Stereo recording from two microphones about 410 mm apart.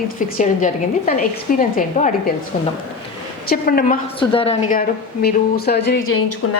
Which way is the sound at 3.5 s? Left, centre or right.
Left.